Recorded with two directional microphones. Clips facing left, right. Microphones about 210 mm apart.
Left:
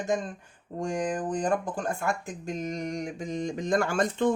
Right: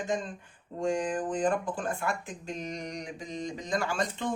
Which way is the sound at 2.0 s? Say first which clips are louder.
Left 3 dB; 45° left (ahead or behind).